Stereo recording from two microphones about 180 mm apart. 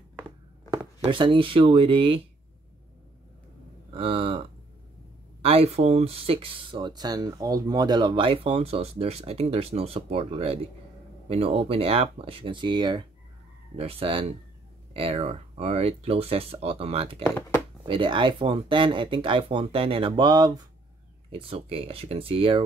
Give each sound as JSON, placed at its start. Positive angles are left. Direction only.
{"t": 0.7, "sound": "speech", "side_deg": -25}
{"t": 3.9, "sound": "a sound", "side_deg": -30}
{"t": 5.4, "sound": "speech", "side_deg": -35}